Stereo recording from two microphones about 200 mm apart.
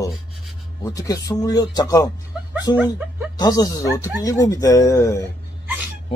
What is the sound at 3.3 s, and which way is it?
Speech, 20° left (ahead or behind).